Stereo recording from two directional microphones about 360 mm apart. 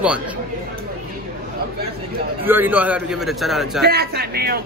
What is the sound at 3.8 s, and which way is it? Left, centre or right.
Speech, right.